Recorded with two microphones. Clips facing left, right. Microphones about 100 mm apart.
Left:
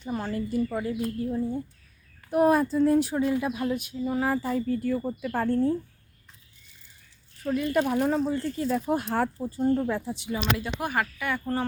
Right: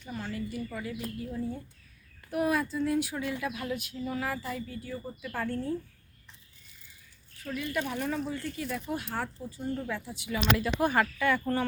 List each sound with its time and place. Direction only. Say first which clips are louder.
0.0 s speech: left 6 dB; 40° left (ahead or behind); by 4.2 s 20° left (ahead or behind)
4.2 s speech: left 8 dB; 35° left (ahead or behind); by 5.1 s 65° left (ahead or behind)
5.2 s speech: left 5 dB; 40° left (ahead or behind)
7.4 s speech: left 8 dB; 50° left (ahead or behind)
9.0 s speech: left 8 dB; 55° left (ahead or behind); by 10.8 s 30° left (ahead or behind)
10.8 s speech: right 2 dB; 10° left (ahead or behind)